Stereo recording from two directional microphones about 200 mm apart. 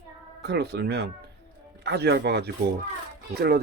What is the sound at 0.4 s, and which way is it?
Speech, 55° right (ahead or behind).